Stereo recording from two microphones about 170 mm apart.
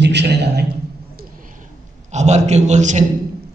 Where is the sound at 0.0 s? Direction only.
90° right.